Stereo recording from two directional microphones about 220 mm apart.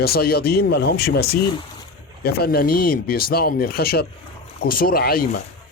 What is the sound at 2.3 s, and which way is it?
Speech, 45° left (ahead or behind).